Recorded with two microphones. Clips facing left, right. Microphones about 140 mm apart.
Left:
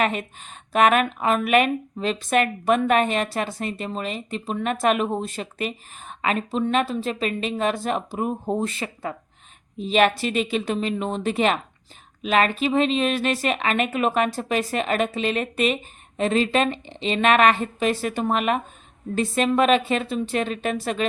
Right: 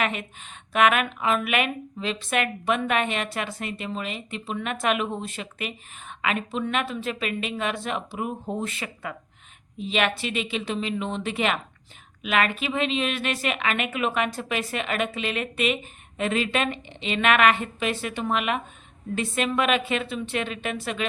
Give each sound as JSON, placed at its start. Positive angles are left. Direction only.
{"t": 0.0, "sound": "speech", "side_deg": 40}